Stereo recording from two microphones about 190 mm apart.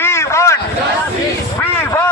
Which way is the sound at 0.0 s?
15° left (ahead or behind).